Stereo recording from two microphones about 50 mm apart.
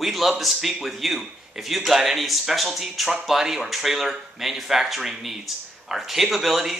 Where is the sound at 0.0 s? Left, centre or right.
Centre.